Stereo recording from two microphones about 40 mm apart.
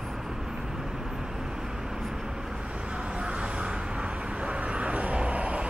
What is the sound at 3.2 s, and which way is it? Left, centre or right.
Vehicle, right.